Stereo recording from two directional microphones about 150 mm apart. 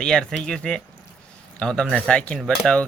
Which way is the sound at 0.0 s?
5° left (ahead or behind).